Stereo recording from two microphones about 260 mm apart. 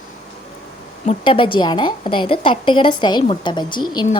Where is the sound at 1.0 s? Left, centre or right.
Left.